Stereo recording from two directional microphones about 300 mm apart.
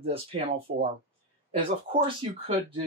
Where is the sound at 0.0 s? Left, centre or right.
Centre.